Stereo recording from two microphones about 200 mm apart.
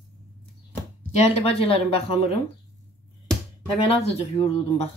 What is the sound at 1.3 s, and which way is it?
Speech, 30° left (ahead or behind).